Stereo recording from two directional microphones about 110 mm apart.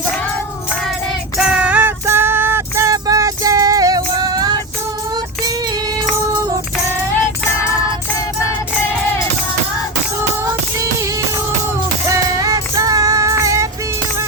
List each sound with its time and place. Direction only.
1.4 s music: 10° right (ahead or behind); by 5.8 s 35° right (ahead or behind)
12.0 s music: 30° right (ahead or behind)